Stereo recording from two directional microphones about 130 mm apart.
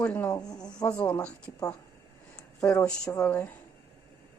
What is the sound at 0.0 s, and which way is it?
Speech, 15° left (ahead or behind).